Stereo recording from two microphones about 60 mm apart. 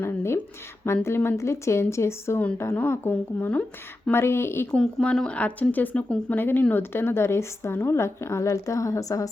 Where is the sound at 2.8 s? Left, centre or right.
Left.